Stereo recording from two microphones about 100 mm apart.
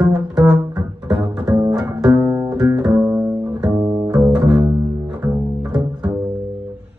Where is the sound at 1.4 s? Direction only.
50° right (ahead or behind).